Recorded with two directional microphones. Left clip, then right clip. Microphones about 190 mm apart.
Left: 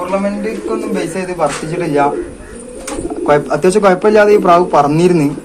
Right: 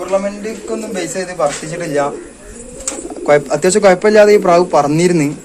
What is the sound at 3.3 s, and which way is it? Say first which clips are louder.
A man's voice: even; 30° right (ahead or behind).